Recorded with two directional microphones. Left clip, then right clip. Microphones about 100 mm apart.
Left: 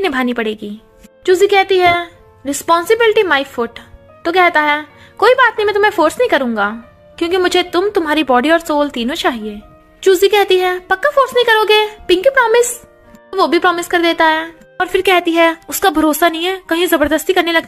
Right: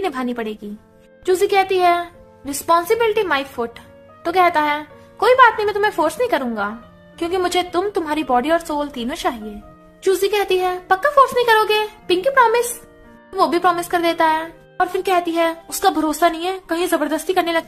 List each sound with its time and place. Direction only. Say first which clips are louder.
0.0 s speech: left 7 dB; 55° left (ahead or behind)
1.2 s a woman's voice: left 5 dB; 45° left (ahead or behind)
13.3 s a woman's voice: left 4 dB; 40° left (ahead or behind)